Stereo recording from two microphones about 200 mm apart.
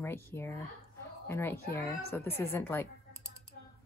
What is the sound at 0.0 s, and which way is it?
A child's voice, 10° left (ahead or behind).